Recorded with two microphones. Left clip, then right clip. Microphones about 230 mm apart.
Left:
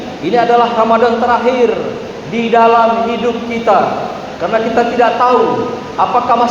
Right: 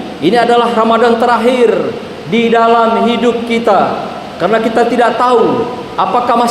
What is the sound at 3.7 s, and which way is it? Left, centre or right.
A man's voice, right.